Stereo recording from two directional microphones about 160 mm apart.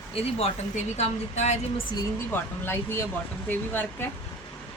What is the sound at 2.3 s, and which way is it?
Speech, 15° left (ahead or behind).